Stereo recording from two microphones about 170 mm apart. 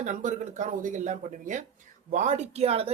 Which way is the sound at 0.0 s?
45° right (ahead or behind).